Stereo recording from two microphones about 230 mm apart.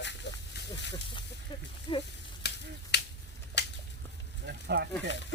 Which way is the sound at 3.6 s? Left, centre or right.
Left.